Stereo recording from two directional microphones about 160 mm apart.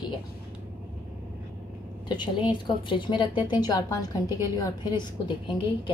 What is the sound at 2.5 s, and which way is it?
A woman's voice, 30° left (ahead or behind).